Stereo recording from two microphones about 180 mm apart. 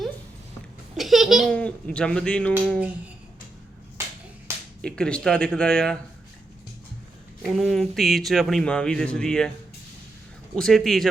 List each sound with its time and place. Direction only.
0.9 s speech: centre (ahead or behind)
4.8 s speech: 5° left (ahead or behind)
7.4 s speech: centre (ahead or behind)
10.5 s speech: 5° left (ahead or behind)